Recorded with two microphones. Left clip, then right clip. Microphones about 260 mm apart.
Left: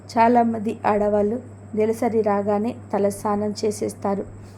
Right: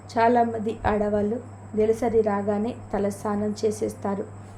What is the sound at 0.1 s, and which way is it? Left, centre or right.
A woman's voice, left.